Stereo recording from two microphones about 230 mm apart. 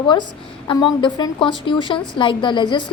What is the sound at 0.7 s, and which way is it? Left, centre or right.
A woman's voice, centre.